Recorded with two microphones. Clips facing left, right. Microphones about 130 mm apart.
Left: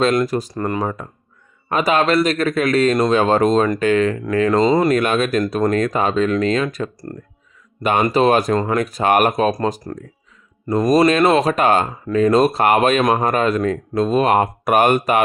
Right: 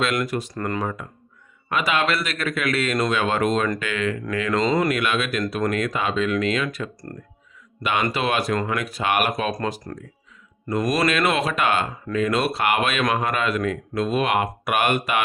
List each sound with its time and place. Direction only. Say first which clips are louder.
0.0 s speech: left 7 dB; 35° left (ahead or behind)
0.8 s speech: left 4 dB; 35° left (ahead or behind)
4.9 s speech: left 6 dB; 40° left (ahead or behind)